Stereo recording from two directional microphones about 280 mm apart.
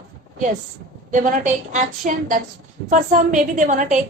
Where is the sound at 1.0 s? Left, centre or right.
Right.